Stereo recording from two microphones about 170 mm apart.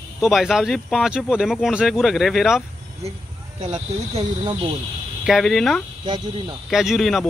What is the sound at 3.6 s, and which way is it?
Speech, 30° right (ahead or behind).